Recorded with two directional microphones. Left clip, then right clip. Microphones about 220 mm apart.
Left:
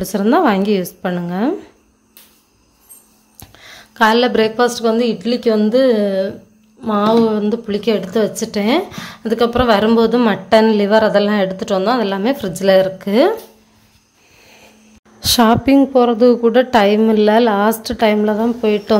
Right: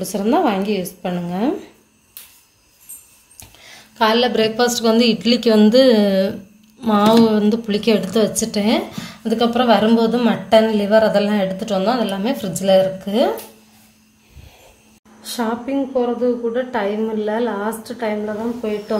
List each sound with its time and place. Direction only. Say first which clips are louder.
0.0 s a woman's voice: left 3 dB; 20° left (ahead or behind)
3.3 s a woman's voice: left 3 dB; 15° left (ahead or behind)
15.2 s a woman's voice: left 11 dB; 45° left (ahead or behind)